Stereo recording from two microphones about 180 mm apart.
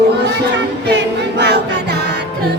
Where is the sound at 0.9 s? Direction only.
70° right (ahead or behind).